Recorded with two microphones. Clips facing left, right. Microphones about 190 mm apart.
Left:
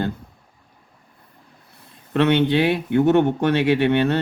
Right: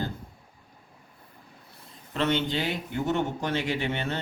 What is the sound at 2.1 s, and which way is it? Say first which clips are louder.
Speech: left 9 dB; 65° left (ahead or behind).